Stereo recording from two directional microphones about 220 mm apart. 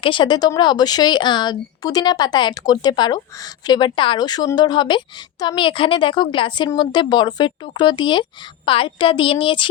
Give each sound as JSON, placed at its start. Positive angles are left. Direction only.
{"t": 0.0, "sound": "speech", "side_deg": 20}